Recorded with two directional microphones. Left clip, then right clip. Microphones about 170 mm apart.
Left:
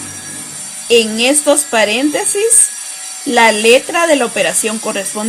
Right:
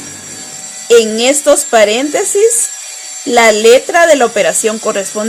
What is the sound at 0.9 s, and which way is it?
Speech, 30° right (ahead or behind).